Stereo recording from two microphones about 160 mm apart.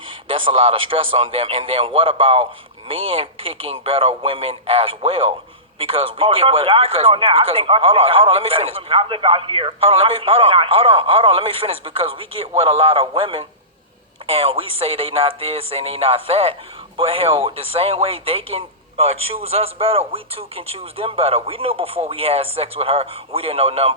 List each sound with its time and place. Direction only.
0.3 s speech: 35° right (ahead or behind)